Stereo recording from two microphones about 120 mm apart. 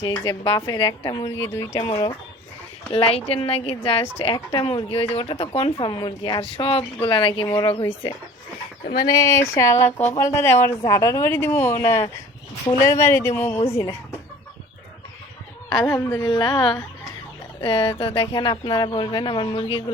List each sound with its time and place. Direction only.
0.0 s speech: 35° left (ahead or behind)
1.4 s speech: 20° left (ahead or behind)
1.8 s speech: 40° left (ahead or behind)
2.9 s speech: 55° left (ahead or behind)
9.0 s speech: 30° left (ahead or behind)
15.8 s a woman's voice: 20° left (ahead or behind)
16.2 s speech: 40° left (ahead or behind)